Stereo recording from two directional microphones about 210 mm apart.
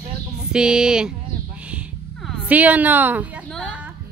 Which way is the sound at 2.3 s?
5° right (ahead or behind).